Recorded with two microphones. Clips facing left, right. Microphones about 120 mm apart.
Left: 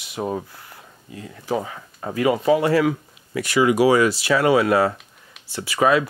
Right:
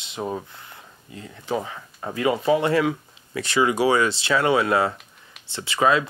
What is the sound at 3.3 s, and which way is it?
Speech, 30° right (ahead or behind).